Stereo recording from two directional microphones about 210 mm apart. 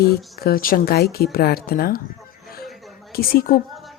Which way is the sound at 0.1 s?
45° left (ahead or behind).